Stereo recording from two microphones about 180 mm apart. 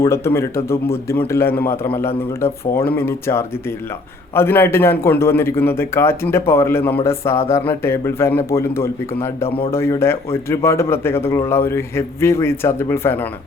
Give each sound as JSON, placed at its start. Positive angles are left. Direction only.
{"t": 0.0, "sound": "a man's voice", "side_deg": 15}